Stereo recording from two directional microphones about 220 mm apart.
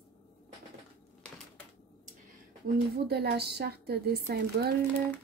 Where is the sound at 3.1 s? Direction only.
50° right (ahead or behind).